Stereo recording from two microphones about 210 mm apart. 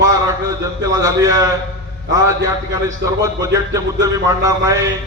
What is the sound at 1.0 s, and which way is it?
A man's voice, 15° right (ahead or behind).